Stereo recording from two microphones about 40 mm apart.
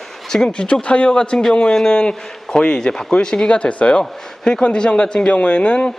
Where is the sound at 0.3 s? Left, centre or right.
Centre.